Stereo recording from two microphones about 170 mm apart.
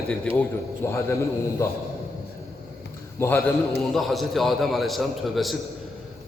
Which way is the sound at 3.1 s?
15° left (ahead or behind).